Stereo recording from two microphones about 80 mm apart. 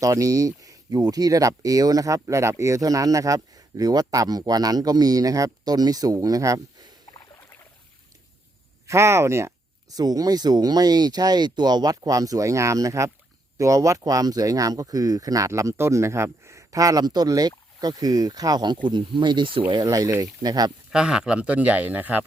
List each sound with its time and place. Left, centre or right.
0.0 s speech: right
8.9 s speech: right
9.9 s speech: right
19.8 s speech: right
20.9 s speech: centre